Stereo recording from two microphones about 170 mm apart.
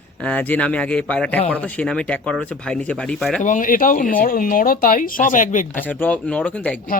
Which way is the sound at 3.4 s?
50° left (ahead or behind).